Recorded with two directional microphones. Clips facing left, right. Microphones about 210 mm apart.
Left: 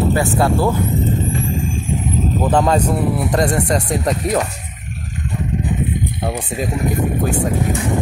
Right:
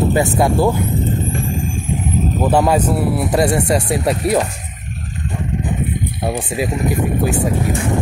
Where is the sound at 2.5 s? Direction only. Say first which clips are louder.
Right 1 dB; 10° right (ahead or behind).